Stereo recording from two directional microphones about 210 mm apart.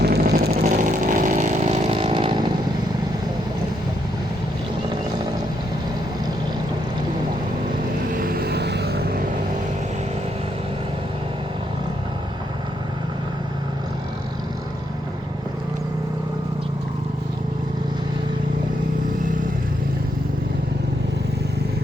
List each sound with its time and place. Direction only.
0.0 s vehicle: 50° right (ahead or behind); by 2.5 s 20° right (ahead or behind)
8.2 s vehicle: 45° right (ahead or behind)